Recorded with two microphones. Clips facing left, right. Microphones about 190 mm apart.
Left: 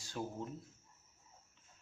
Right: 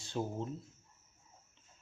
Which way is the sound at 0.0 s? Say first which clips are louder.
Right 5 dB; 25° right (ahead or behind).